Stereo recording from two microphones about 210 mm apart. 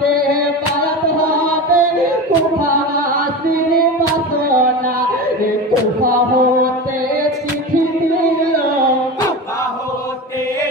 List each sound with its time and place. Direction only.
0.0 s music: 45° right (ahead or behind)